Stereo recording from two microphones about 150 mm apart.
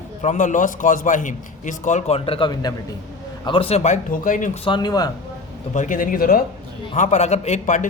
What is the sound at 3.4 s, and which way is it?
Speech, 35° left (ahead or behind).